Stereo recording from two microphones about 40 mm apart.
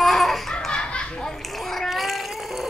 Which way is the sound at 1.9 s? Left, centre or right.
Centre.